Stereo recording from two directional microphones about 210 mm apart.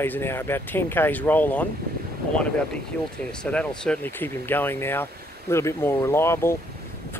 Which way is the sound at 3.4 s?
5° left (ahead or behind).